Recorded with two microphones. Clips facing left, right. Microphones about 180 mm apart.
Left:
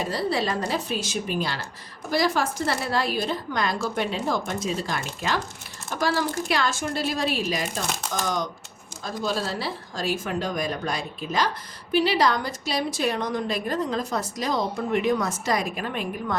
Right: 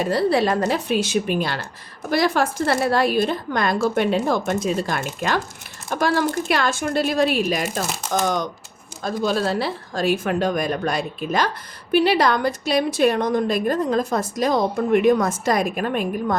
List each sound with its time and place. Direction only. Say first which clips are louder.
0.0 s a woman's voice: right 7 dB; 60° right (ahead or behind)